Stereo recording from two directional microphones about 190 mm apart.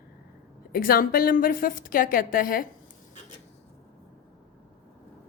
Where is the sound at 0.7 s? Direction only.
50° left (ahead or behind).